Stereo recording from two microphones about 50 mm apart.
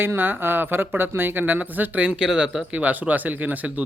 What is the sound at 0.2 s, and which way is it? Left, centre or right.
Speech, right.